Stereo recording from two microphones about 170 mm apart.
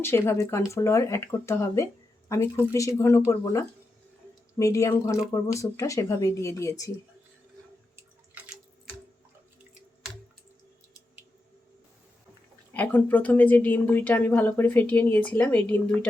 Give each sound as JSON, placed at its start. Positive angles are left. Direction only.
{"t": 0.0, "sound": "speech", "side_deg": 15}
{"t": 7.9, "sound": "drip", "side_deg": -10}
{"t": 12.7, "sound": "speech", "side_deg": 10}